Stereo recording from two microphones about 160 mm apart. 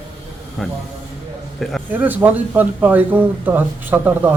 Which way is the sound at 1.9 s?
10° right (ahead or behind).